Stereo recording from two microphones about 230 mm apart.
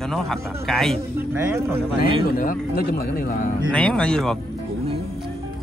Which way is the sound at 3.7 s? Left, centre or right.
Centre.